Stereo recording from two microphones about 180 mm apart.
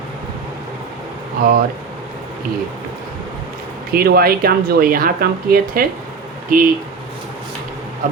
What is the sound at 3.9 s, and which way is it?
Speech, 55° right (ahead or behind).